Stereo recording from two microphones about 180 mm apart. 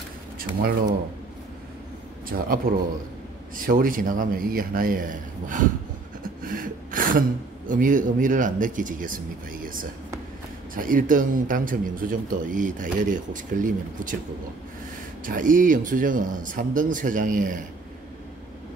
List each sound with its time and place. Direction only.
0.4 s speech: 55° right (ahead or behind)
2.2 s a man's voice: 55° right (ahead or behind)
15.2 s a man's voice: 50° right (ahead or behind)